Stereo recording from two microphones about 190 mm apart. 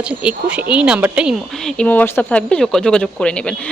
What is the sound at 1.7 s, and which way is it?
Speech, 5° left (ahead or behind).